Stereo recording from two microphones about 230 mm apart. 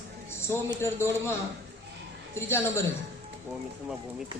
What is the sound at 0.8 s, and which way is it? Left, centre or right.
Speech, centre.